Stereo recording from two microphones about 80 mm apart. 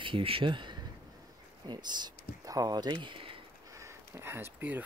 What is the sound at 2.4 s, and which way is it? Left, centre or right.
Speech, right.